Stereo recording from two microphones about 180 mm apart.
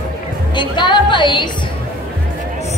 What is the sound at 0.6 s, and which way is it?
Speech, 25° left (ahead or behind).